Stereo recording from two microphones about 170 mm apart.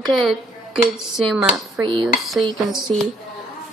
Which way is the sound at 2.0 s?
Centre (ahead or behind).